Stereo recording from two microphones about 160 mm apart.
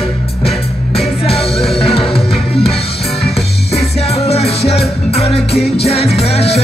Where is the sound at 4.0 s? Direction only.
40° left (ahead or behind).